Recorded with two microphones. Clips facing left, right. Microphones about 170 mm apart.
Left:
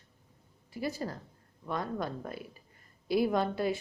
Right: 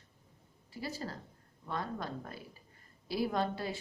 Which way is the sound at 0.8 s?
15° left (ahead or behind).